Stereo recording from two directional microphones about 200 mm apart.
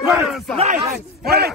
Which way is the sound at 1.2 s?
50° right (ahead or behind).